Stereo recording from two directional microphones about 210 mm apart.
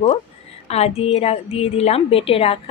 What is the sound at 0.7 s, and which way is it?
A woman's voice, 30° left (ahead or behind).